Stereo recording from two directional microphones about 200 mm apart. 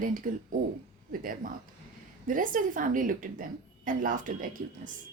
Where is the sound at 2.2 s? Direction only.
40° right (ahead or behind).